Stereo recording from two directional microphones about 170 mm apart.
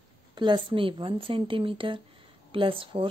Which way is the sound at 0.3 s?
25° right (ahead or behind).